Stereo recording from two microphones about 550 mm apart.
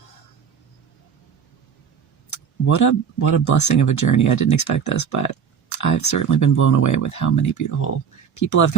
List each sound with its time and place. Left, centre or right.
2.3 s speech: left